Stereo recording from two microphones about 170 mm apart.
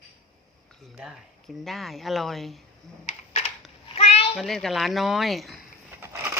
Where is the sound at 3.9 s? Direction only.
35° left (ahead or behind).